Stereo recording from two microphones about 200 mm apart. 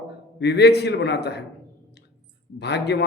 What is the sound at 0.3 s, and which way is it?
Speech, 55° left (ahead or behind).